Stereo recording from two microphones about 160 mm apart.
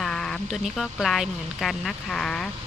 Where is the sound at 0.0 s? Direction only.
5° left (ahead or behind).